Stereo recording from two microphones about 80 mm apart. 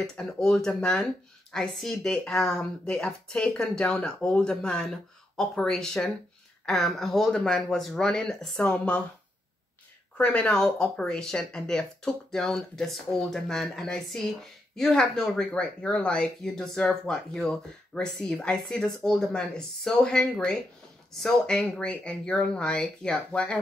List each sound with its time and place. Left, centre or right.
0.0 s speech: centre
10.1 s speech: centre